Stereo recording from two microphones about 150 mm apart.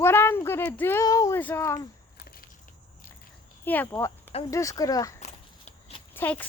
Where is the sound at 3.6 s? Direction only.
15° left (ahead or behind).